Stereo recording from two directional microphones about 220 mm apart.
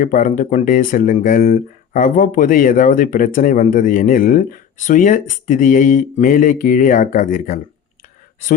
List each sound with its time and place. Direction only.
0.0 s speech: 35° left (ahead or behind)